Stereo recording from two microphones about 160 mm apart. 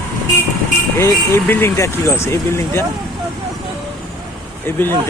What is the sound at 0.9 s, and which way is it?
Speech, 15° left (ahead or behind).